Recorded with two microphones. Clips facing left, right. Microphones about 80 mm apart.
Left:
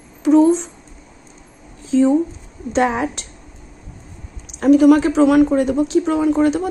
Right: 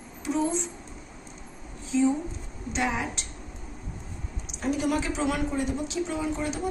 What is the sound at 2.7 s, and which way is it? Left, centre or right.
Speech, left.